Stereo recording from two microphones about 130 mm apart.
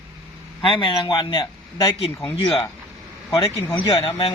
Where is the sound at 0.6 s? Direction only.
40° left (ahead or behind).